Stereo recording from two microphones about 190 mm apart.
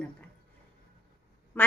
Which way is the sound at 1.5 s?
10° left (ahead or behind).